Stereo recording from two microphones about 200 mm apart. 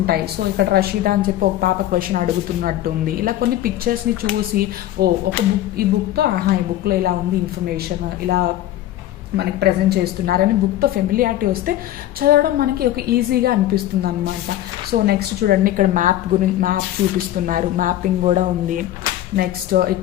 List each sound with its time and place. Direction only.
0.0 s a woman's voice: 50° right (ahead or behind)
15.0 s a woman's voice: 50° right (ahead or behind)